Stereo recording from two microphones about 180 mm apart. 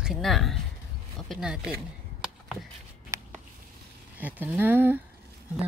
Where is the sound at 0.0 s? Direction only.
Centre (ahead or behind).